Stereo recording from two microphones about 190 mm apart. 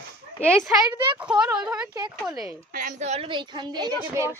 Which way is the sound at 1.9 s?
20° right (ahead or behind).